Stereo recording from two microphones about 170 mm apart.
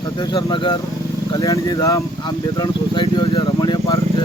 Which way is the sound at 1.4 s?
20° left (ahead or behind).